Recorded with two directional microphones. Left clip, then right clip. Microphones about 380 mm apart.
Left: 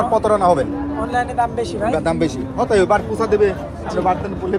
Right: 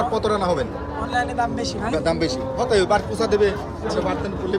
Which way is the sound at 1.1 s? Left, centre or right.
Centre.